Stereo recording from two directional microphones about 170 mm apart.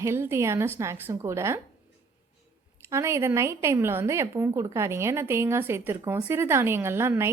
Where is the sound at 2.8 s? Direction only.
15° right (ahead or behind).